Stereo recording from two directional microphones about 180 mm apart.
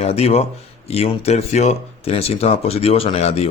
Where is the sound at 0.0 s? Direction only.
35° left (ahead or behind).